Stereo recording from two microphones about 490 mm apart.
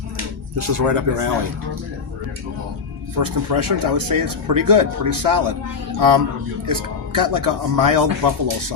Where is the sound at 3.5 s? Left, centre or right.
Right.